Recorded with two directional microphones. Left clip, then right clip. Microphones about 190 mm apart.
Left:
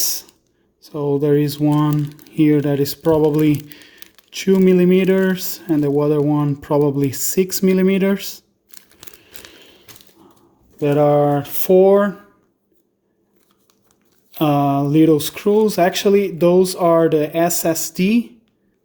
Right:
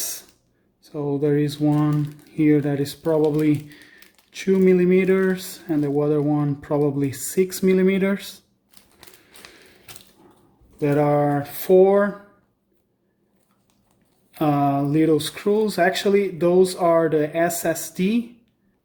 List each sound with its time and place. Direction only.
0.0 s a sound: 25° left (ahead or behind)
0.9 s speech: 30° left (ahead or behind)
10.8 s speech: 35° left (ahead or behind)
14.3 s speech: 35° left (ahead or behind)